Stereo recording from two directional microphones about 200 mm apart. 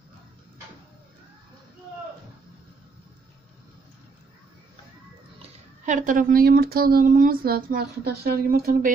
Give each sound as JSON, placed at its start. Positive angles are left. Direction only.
{"t": 5.9, "sound": "a woman's voice", "side_deg": -40}